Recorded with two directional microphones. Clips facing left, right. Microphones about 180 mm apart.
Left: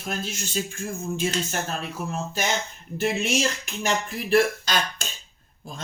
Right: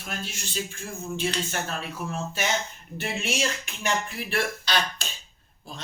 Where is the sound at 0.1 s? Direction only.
40° left (ahead or behind).